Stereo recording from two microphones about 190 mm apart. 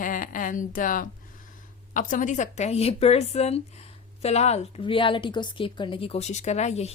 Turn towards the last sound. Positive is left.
turn(degrees=35)  # may be behind; listen again after turning